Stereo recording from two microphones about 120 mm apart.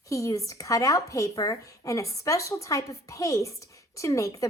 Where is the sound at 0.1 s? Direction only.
25° left (ahead or behind).